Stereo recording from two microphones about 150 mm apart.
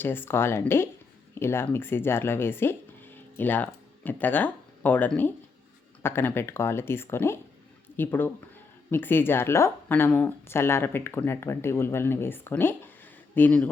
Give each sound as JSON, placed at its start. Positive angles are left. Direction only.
{"t": 0.0, "sound": "speech", "side_deg": 15}